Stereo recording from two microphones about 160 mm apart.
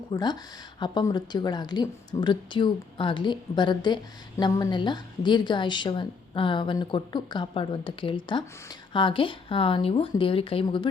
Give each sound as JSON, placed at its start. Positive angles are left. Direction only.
{"t": 0.1, "sound": "a woman's voice", "side_deg": 25}